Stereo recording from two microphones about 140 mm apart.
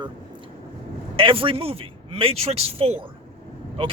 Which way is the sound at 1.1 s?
40° right (ahead or behind).